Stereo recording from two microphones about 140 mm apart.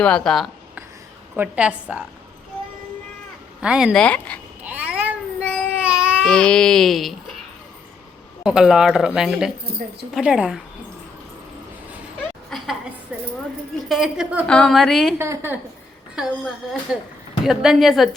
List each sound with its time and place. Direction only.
0.0 s speech: 5° left (ahead or behind)
1.4 s a woman's voice: 10° right (ahead or behind)
3.6 s a woman's voice: 5° right (ahead or behind)
3.9 s speech: 10° left (ahead or behind)
4.6 s cat: 10° right (ahead or behind)
5.8 s baby cry: 10° right (ahead or behind)
6.2 s speech: 5° left (ahead or behind)
8.4 s a woman's voice: 5° right (ahead or behind)
12.5 s a sound: centre (ahead or behind)
13.8 s speech: centre (ahead or behind)
14.4 s speech: 5° left (ahead or behind)
15.2 s a woman's voice: 20° right (ahead or behind)
16.1 s speech: 5° right (ahead or behind)